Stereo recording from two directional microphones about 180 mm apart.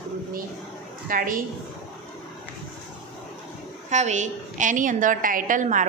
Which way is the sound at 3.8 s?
40° right (ahead or behind).